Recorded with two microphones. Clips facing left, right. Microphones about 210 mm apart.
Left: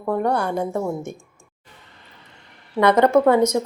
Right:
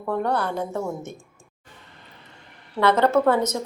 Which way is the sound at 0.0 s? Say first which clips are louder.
Left 3 dB; 10° left (ahead or behind).